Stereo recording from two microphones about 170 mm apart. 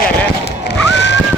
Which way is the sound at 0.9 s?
90° left.